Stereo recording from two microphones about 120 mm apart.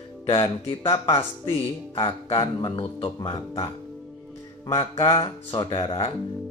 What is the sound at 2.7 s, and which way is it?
Speech, 50° left (ahead or behind).